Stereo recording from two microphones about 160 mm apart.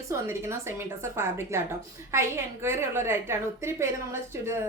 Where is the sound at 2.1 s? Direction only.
15° right (ahead or behind).